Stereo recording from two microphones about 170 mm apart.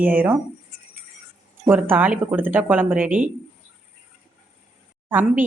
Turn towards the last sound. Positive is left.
turn(degrees=-10)  # may be behind; listen again after turning